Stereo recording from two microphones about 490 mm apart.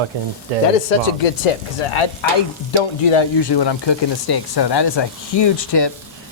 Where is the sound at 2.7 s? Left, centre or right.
Left.